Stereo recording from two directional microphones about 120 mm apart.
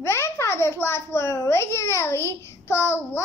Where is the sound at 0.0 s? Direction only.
25° left (ahead or behind).